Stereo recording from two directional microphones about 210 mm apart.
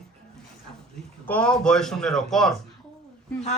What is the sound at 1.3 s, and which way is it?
Speech, 5° left (ahead or behind).